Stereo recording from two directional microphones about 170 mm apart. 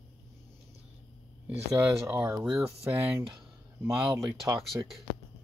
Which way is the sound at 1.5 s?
10° right (ahead or behind).